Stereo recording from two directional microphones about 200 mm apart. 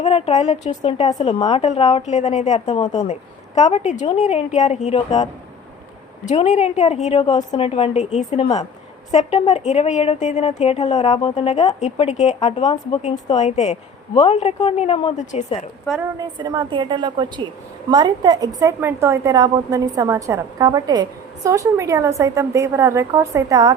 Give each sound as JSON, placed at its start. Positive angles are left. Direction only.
{"t": 0.0, "sound": "speech", "side_deg": 30}
{"t": 2.6, "sound": "a woman's voice", "side_deg": 20}
{"t": 2.9, "sound": "speech", "side_deg": 35}
{"t": 16.1, "sound": "a woman's voice", "side_deg": -20}